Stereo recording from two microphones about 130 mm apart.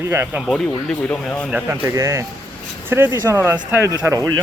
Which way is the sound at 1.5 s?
10° right (ahead or behind).